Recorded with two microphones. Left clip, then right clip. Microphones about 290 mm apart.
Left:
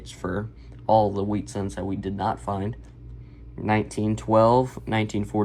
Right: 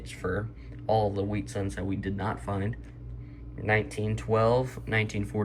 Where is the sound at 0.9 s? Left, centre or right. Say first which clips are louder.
Left 7 dB; centre.